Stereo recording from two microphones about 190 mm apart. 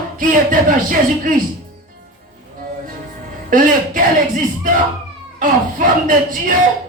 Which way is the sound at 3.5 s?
45° right (ahead or behind).